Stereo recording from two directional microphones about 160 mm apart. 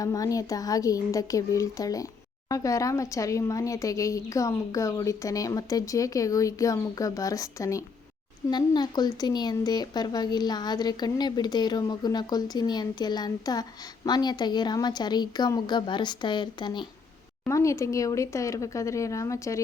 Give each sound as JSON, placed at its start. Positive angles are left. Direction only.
{"t": 0.0, "sound": "speech", "side_deg": 20}